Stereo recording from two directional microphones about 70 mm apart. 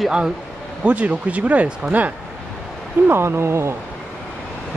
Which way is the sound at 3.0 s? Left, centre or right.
Right.